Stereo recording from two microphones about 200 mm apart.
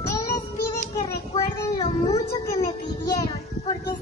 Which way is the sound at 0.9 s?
20° left (ahead or behind).